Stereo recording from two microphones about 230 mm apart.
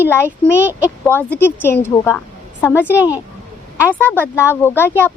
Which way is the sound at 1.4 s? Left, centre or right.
Centre.